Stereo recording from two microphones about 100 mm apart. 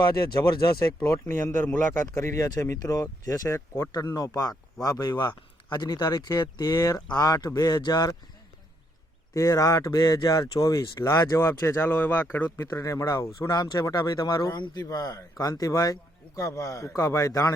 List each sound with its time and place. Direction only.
0.0 s speech: 45° left (ahead or behind)
1.2 s speech: 25° left (ahead or behind)
2.0 s speech: 30° left (ahead or behind)
9.3 s speech: 30° left (ahead or behind)
12.5 s speech: 30° left (ahead or behind)